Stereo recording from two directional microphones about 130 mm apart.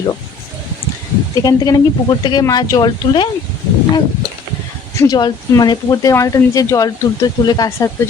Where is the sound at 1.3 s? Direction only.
30° left (ahead or behind).